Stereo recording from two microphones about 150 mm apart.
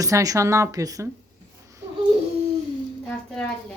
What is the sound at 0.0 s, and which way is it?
A woman's voice, 25° right (ahead or behind).